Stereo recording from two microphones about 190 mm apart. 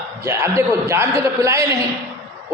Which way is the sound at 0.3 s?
15° right (ahead or behind).